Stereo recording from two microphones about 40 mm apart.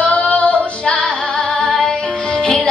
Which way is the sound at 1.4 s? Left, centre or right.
Centre.